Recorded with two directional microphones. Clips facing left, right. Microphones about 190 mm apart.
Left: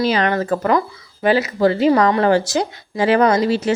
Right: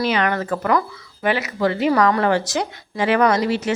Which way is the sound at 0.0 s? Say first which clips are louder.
Left 3 dB; 35° left (ahead or behind).